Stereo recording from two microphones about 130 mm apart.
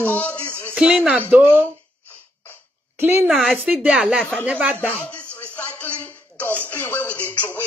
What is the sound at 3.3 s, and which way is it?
Speech, centre (ahead or behind).